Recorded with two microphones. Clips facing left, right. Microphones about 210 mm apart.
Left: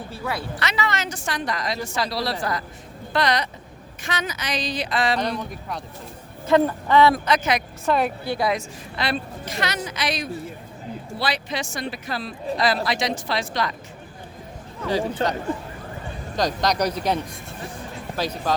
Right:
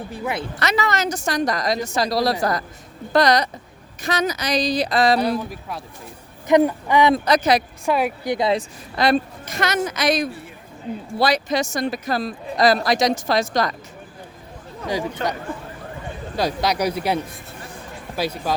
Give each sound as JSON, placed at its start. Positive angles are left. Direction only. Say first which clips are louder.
{"t": 0.1, "sound": "speech", "louder": "right 2 dB", "side_deg": -20}
{"t": 0.6, "sound": "a woman's voice", "louder": "right 6 dB", "side_deg": -40}
{"t": 5.2, "sound": "speech", "louder": "right 4 dB", "side_deg": -5}
{"t": 6.5, "sound": "speech", "louder": "right 2 dB", "side_deg": -15}
{"t": 7.3, "sound": "a woman's voice", "louder": "right 4 dB", "side_deg": -35}
{"t": 7.9, "sound": "speech", "louder": "right 1 dB", "side_deg": -10}
{"t": 9.0, "sound": "speech", "louder": "right 8 dB", "side_deg": -45}
{"t": 15.2, "sound": "speech", "louder": "left 1 dB", "side_deg": 30}
{"t": 16.3, "sound": "speech", "louder": "right 1 dB", "side_deg": -10}
{"t": 18.2, "sound": "speech", "louder": "right 1 dB", "side_deg": -10}